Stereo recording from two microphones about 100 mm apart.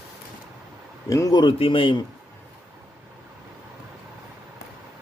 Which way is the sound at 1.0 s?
35° left (ahead or behind).